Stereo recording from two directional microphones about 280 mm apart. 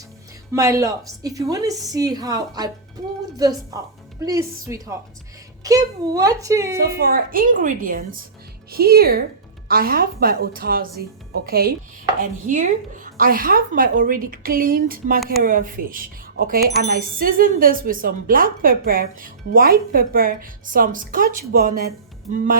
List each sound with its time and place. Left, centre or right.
0.5 s a woman's voice: centre
3.7 s a woman's voice: centre
6.9 s speech: right
12.2 s chopping: right
13.1 s speech: right